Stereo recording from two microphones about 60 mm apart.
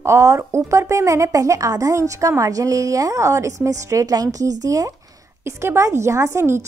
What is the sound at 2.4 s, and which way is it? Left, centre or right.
A woman's voice, right.